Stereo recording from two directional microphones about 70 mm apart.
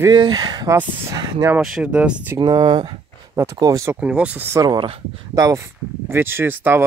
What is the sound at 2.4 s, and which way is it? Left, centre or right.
Speech, right.